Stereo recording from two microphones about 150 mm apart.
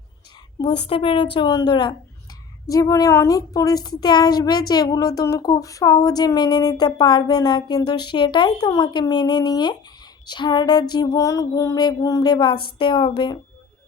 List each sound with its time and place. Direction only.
0.9 s a woman's voice: 35° left (ahead or behind)